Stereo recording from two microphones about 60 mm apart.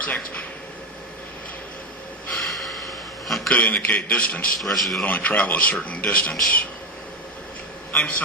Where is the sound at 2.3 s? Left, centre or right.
Centre.